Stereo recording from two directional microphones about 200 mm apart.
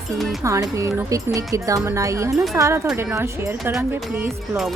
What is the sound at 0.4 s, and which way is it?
Speech, 15° right (ahead or behind).